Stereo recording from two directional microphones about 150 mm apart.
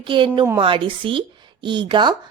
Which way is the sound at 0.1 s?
30° right (ahead or behind).